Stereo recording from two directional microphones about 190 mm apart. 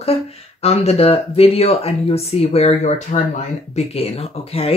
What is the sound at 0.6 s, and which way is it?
Speech, 30° left (ahead or behind).